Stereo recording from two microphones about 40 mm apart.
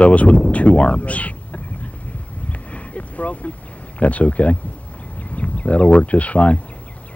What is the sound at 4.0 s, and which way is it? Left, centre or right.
Speech, left.